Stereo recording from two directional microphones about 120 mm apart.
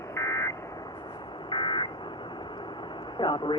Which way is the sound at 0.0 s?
25° left (ahead or behind).